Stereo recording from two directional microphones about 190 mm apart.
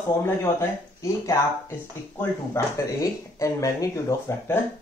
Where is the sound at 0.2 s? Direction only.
15° left (ahead or behind).